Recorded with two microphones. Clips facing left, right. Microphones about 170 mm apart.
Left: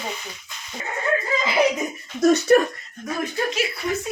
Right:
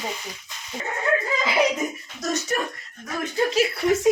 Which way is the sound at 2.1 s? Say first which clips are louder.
Left 12 dB; 60° left (ahead or behind).